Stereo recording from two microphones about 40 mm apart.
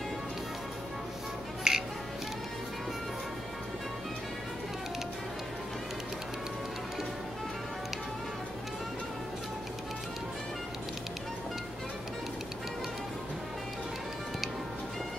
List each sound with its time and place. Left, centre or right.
1.7 s music: centre